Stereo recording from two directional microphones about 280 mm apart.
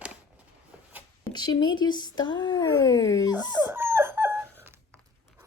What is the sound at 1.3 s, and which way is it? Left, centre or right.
Speech, centre.